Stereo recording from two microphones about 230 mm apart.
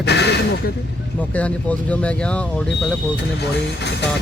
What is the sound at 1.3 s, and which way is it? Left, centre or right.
Speech, centre.